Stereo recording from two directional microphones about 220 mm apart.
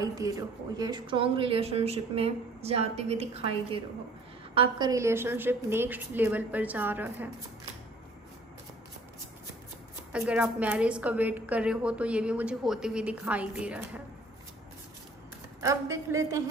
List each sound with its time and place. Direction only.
0.0 s a woman's voice: 15° right (ahead or behind)
10.1 s a woman's voice: 5° right (ahead or behind)
15.6 s a woman's voice: 15° right (ahead or behind)